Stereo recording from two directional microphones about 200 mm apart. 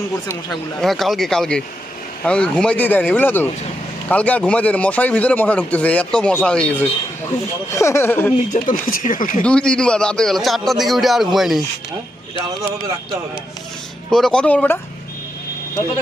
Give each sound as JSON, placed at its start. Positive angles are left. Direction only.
{"t": 0.8, "sound": "speech", "side_deg": 0}
{"t": 8.5, "sound": "speech", "side_deg": 40}
{"t": 9.4, "sound": "speech", "side_deg": 5}
{"t": 14.1, "sound": "speech", "side_deg": 0}